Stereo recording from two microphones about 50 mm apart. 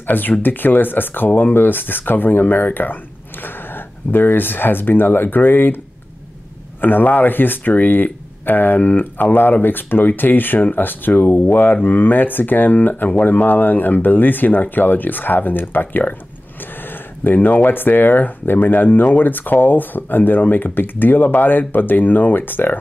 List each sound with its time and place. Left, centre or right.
0.0 s speech: left
6.8 s speech: left
17.2 s speech: left